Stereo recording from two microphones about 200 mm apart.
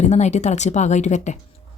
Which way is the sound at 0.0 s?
35° left (ahead or behind).